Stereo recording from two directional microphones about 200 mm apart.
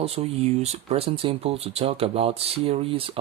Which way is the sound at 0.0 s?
30° right (ahead or behind).